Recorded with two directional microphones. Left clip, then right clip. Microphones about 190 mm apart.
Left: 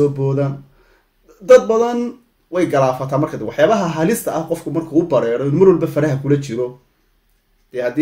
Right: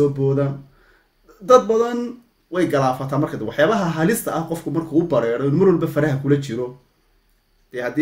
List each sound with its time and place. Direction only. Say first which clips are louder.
0.2 s speech: left 1 dB; 15° right (ahead or behind)
7.7 s speech: left 5 dB; 15° right (ahead or behind)